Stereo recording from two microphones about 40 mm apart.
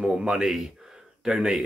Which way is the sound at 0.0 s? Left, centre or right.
Centre.